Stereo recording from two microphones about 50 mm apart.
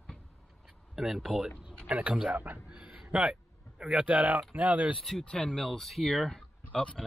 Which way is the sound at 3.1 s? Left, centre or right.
Centre.